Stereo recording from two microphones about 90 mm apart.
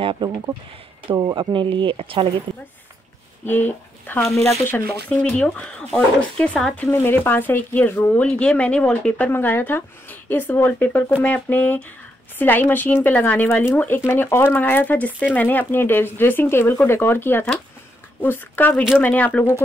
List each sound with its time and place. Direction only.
0.2 s speech: 60° right (ahead or behind)
1.1 s speech: 50° right (ahead or behind); by 2.2 s 75° right (ahead or behind)
2.5 s speech: 60° right (ahead or behind)
3.4 s speech: 20° left (ahead or behind)
5.3 s speech: 10° left (ahead or behind)
6.9 s speech: 25° left (ahead or behind)
9.3 s speech: 20° left (ahead or behind)